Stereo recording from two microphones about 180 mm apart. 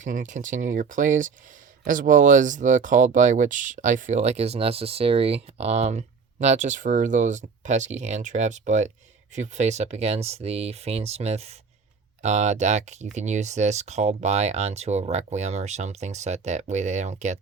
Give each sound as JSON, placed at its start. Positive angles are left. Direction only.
{"t": 0.0, "sound": "speech", "side_deg": -45}